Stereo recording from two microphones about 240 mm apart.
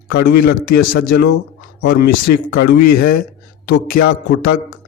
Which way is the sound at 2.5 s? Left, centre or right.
Left.